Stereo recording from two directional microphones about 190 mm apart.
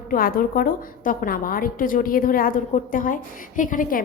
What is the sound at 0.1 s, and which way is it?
A woman's voice, 50° left (ahead or behind).